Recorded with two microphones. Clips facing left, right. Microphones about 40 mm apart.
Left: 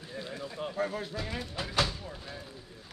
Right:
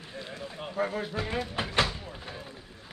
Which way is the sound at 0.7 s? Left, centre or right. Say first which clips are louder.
Right 5 dB; centre.